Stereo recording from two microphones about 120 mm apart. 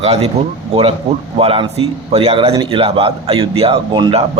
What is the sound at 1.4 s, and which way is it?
A man's voice, 55° right (ahead or behind).